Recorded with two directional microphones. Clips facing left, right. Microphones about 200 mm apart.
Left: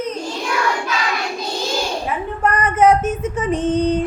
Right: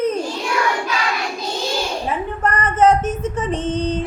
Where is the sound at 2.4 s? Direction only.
10° left (ahead or behind).